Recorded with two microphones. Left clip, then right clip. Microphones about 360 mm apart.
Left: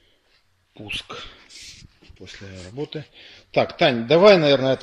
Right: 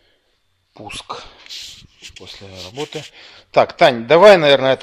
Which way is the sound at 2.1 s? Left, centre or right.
Right.